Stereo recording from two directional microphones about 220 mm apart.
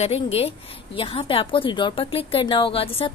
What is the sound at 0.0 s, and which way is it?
A woman's voice, 25° left (ahead or behind).